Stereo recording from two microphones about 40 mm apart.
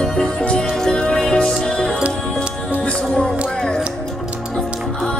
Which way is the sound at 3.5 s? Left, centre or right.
Centre.